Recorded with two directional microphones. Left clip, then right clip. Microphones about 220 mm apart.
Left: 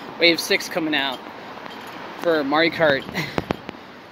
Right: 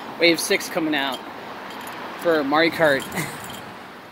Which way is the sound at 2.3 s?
Centre (ahead or behind).